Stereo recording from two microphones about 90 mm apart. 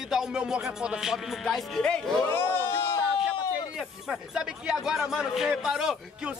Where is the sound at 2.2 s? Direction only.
25° left (ahead or behind).